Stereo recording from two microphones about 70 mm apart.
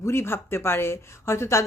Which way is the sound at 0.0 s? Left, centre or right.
Left.